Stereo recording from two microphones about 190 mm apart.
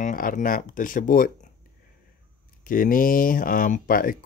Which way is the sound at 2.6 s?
45° left (ahead or behind).